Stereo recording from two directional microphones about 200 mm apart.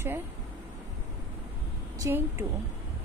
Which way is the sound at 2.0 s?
10° right (ahead or behind).